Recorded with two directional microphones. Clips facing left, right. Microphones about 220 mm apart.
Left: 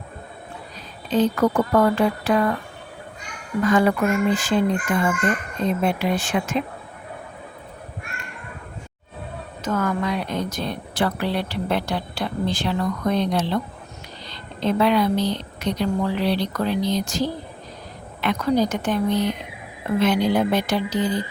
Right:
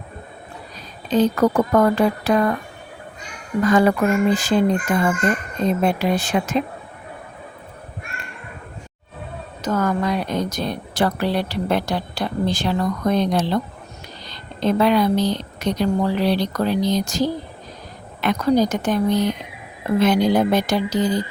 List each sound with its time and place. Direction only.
1.1 s a woman's voice: 40° right (ahead or behind)
3.6 s a woman's voice: 40° right (ahead or behind)
9.6 s a woman's voice: 40° right (ahead or behind)
14.6 s a woman's voice: 40° right (ahead or behind)